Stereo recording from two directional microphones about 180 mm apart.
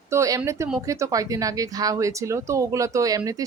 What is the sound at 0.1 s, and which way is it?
Speech, 15° right (ahead or behind).